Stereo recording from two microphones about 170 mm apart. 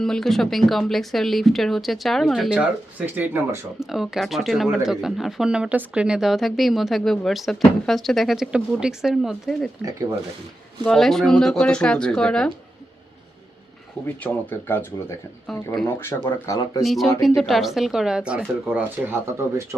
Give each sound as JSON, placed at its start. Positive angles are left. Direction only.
{"t": 0.0, "sound": "speech", "side_deg": 5}
{"t": 10.8, "sound": "speech", "side_deg": 0}
{"t": 14.3, "sound": "speech", "side_deg": 10}
{"t": 15.4, "sound": "speech", "side_deg": 0}
{"t": 16.2, "sound": "speech", "side_deg": 20}
{"t": 16.8, "sound": "speech", "side_deg": 0}